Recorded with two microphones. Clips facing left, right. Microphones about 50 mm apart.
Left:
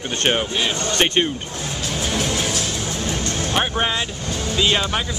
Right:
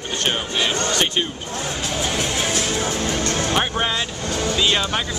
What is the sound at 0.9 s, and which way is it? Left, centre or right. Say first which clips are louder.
Speech: left 2 dB; left.